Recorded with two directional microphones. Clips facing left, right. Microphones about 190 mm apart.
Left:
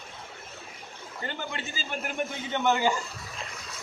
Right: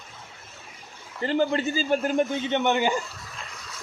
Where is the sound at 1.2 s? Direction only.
35° right (ahead or behind).